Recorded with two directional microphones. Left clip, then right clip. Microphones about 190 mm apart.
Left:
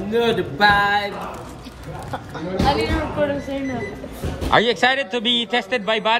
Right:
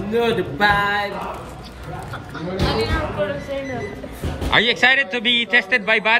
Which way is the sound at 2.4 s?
40° left (ahead or behind).